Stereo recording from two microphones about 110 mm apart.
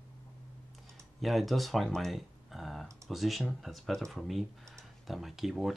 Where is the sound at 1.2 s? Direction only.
Centre (ahead or behind).